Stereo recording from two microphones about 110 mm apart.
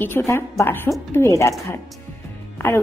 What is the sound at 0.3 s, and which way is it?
Speech, 25° left (ahead or behind).